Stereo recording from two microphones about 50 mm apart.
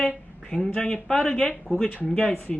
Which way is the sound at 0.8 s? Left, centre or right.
Centre.